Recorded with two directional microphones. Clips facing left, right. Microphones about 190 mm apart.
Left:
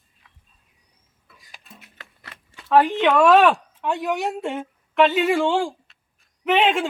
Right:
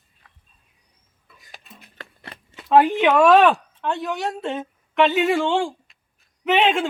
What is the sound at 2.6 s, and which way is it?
A woman's voice, 15° right (ahead or behind).